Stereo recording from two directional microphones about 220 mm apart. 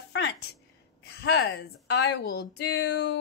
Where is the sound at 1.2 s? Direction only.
50° left (ahead or behind).